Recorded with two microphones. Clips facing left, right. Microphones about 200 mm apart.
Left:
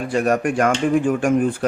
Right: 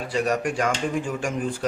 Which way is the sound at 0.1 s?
55° left (ahead or behind).